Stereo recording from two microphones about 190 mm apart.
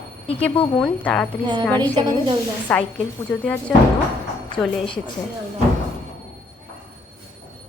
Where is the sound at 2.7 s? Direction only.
5° left (ahead or behind).